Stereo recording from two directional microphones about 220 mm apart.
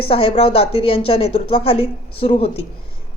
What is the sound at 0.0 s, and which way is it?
A woman's voice, 25° left (ahead or behind).